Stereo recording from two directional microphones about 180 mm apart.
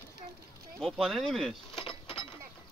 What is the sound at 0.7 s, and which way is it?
Speech, centre (ahead or behind).